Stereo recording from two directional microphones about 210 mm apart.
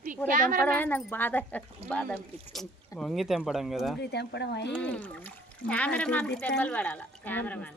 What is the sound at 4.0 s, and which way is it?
Speech, 50° left (ahead or behind).